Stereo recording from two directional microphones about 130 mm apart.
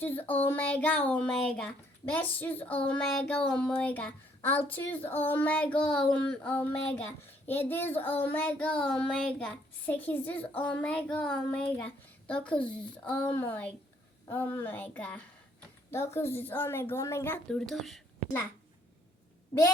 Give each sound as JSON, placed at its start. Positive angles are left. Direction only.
{"t": 0.0, "sound": "child singing", "side_deg": 15}
{"t": 17.5, "sound": "speech", "side_deg": 5}